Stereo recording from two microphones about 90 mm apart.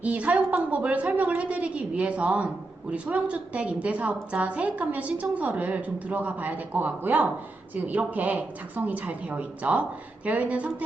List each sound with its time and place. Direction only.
0.0 s a woman's voice: 15° right (ahead or behind)